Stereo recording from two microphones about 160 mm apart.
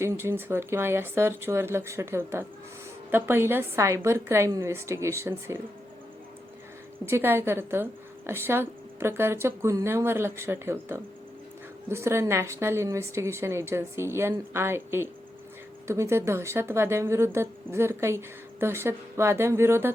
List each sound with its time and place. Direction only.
0.0 s a woman's voice: 15° right (ahead or behind)
7.0 s a woman's voice: 15° right (ahead or behind)